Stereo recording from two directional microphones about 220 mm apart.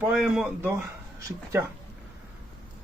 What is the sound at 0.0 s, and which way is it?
Speech, 5° right (ahead or behind).